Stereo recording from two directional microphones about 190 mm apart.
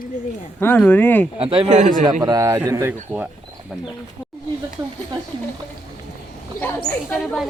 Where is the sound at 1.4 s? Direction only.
30° right (ahead or behind).